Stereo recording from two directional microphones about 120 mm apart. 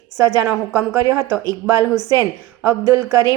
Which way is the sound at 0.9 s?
25° right (ahead or behind).